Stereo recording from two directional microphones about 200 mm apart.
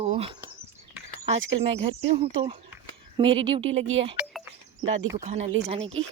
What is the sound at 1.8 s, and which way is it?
Speech, 30° right (ahead or behind).